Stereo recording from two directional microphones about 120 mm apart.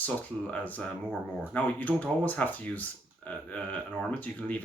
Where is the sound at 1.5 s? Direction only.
10° left (ahead or behind).